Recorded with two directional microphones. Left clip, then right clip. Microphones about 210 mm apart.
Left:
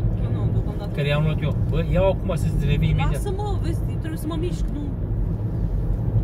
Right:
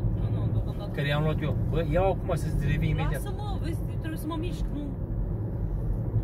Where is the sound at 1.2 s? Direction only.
40° right (ahead or behind).